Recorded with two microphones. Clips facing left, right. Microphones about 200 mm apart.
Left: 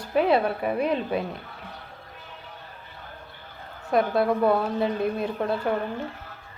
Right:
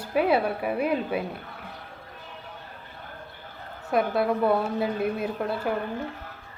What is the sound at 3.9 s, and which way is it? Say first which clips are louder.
A woman's voice: left 2 dB; centre (ahead or behind).